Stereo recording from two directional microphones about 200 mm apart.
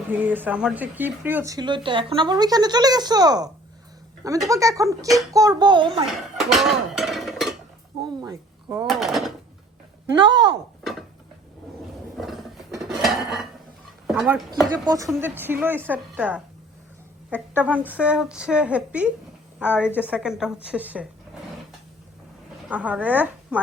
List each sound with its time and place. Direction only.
0.1 s a woman's voice: 10° right (ahead or behind)
6.3 s dishes: centre (ahead or behind)
8.2 s speech: 15° right (ahead or behind)
8.9 s speech: centre (ahead or behind)
10.2 s speech: 60° right (ahead or behind)
12.1 s a sound: centre (ahead or behind)
12.8 s dishes: centre (ahead or behind)
14.1 s speech: centre (ahead or behind)
14.8 s a woman's voice: 15° right (ahead or behind)
22.7 s a woman's voice: 5° right (ahead or behind)